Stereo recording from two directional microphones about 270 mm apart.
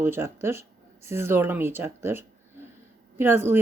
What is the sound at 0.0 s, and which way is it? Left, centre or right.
Speech, centre.